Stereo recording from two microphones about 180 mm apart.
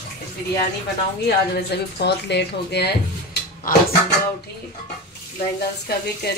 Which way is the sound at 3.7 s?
50° left (ahead or behind).